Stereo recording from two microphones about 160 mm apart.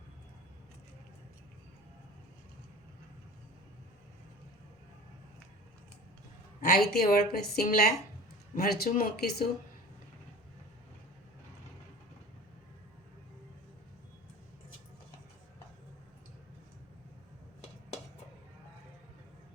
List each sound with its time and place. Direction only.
6.6 s a woman's voice: 70° left (ahead or behind)